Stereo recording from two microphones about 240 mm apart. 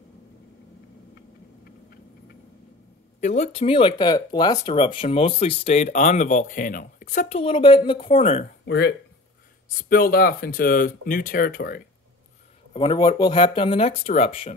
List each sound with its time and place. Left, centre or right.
3.2 s speech: left
8.6 s speech: left
12.7 s speech: centre